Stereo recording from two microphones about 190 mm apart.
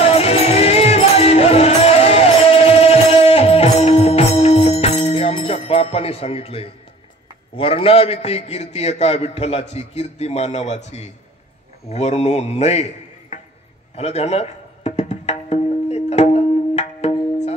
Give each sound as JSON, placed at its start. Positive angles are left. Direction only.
{"t": 0.0, "sound": "music", "side_deg": 30}
{"t": 7.5, "sound": "a man's voice", "side_deg": 30}
{"t": 13.3, "sound": "a sound", "side_deg": 35}
{"t": 13.9, "sound": "music", "side_deg": 35}